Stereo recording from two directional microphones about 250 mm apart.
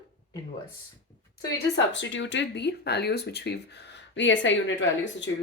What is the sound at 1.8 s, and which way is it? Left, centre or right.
Speech, left.